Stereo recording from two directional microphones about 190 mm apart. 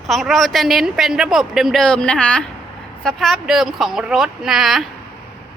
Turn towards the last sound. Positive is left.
turn(degrees=0)  # may be behind; listen again after turning